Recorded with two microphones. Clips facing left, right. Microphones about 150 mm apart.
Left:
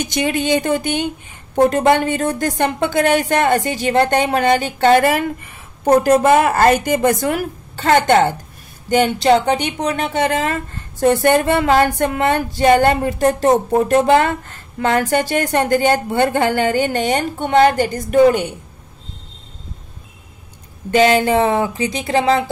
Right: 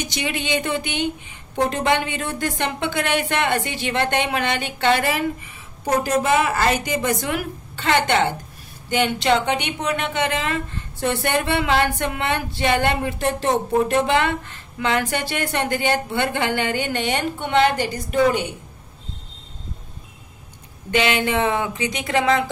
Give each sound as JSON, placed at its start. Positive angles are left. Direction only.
{"t": 0.0, "sound": "a woman's voice", "side_deg": 50}
{"t": 20.9, "sound": "speech", "side_deg": 40}